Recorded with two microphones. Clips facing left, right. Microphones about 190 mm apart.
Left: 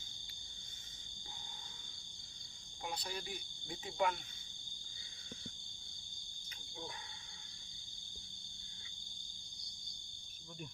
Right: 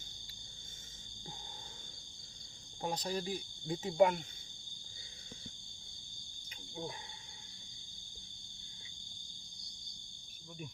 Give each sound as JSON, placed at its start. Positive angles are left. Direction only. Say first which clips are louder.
{"t": 2.8, "sound": "speech", "louder": "right 7 dB", "side_deg": -40}
{"t": 6.5, "sound": "cricket", "louder": "right 6 dB", "side_deg": -25}